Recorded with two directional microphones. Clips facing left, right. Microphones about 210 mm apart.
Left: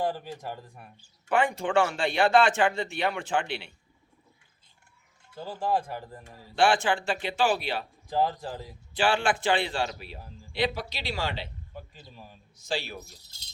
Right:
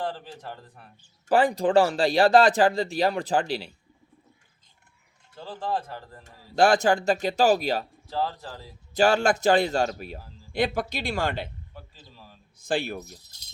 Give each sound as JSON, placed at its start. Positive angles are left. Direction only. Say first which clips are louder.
{"t": 0.0, "sound": "speech", "louder": "left 2 dB", "side_deg": 10}
{"t": 1.3, "sound": "speech", "louder": "right 5 dB", "side_deg": -35}
{"t": 5.4, "sound": "speech", "louder": "left 2 dB", "side_deg": 10}
{"t": 6.6, "sound": "speech", "louder": "right 4 dB", "side_deg": -40}
{"t": 8.0, "sound": "speech", "louder": "left 2 dB", "side_deg": 15}
{"t": 9.0, "sound": "a man's voice", "louder": "right 5 dB", "side_deg": -40}
{"t": 12.1, "sound": "speech", "louder": "left 2 dB", "side_deg": 15}
{"t": 12.5, "sound": "a man's voice", "louder": "right 6 dB", "side_deg": -55}